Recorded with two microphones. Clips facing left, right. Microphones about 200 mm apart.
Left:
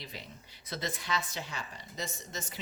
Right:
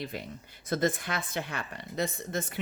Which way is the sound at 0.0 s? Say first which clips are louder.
Right 9 dB; 55° right (ahead or behind).